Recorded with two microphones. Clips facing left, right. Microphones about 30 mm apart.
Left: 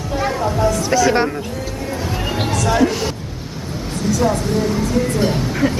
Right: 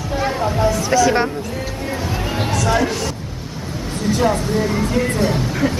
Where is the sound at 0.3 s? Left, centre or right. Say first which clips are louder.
Even; centre.